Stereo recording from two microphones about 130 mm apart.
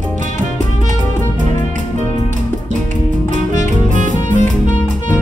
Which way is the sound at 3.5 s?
75° right (ahead or behind).